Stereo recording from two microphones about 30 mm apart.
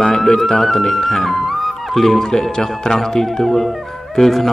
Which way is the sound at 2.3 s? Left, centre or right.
Centre.